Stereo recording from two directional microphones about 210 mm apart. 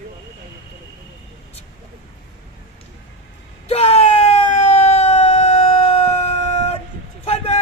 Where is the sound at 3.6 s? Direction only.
30° left (ahead or behind).